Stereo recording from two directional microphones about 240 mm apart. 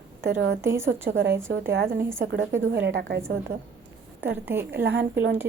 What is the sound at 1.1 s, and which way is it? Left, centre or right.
Speech, right.